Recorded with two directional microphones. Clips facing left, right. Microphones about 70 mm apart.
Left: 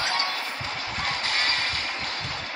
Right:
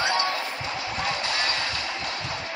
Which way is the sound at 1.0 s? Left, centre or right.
Left.